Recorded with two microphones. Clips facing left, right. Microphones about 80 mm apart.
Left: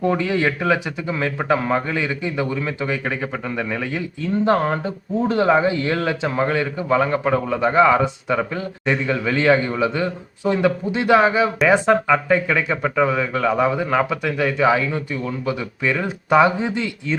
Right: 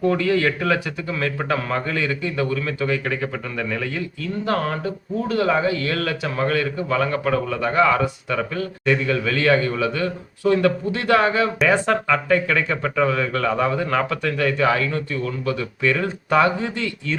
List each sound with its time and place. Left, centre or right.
0.0 s a man's voice: centre